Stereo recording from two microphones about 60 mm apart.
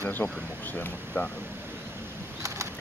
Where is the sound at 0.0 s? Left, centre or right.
Left.